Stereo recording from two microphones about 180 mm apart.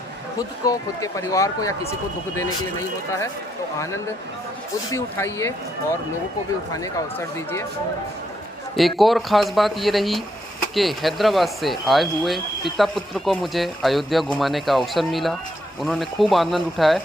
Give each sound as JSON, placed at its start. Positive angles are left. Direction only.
{"t": 0.3, "sound": "speech", "side_deg": 20}
{"t": 4.9, "sound": "speech", "side_deg": 15}
{"t": 9.0, "sound": "speech", "side_deg": 0}